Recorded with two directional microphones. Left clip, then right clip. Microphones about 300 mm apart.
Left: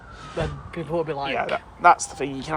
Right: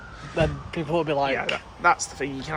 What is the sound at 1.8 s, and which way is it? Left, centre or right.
Speech, centre.